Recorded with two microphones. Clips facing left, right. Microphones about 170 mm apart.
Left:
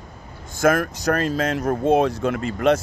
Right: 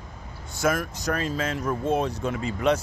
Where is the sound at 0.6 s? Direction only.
75° left (ahead or behind).